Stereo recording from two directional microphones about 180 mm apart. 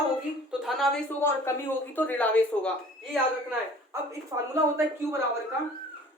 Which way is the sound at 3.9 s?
15° right (ahead or behind).